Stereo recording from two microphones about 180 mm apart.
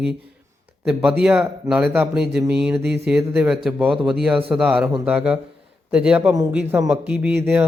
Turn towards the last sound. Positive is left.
turn(degrees=-10)  # may be behind; listen again after turning